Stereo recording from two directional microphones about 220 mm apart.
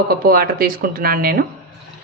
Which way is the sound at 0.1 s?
45° right (ahead or behind).